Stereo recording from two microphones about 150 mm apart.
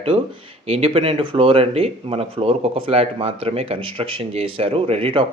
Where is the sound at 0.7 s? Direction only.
40° right (ahead or behind).